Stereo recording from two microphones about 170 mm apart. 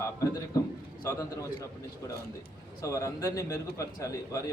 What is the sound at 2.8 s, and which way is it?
Speech, 20° left (ahead or behind).